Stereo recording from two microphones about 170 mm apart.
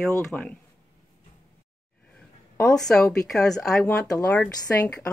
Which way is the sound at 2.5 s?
5° left (ahead or behind).